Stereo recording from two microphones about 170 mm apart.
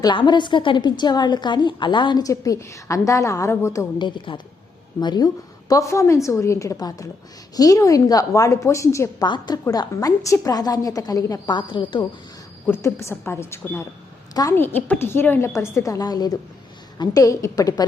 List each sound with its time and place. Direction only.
0.0 s a woman's voice: 25° left (ahead or behind)
12.6 s a woman's voice: 15° left (ahead or behind)